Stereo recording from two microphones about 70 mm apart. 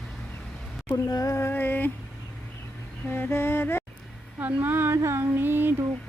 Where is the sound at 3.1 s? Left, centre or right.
Left.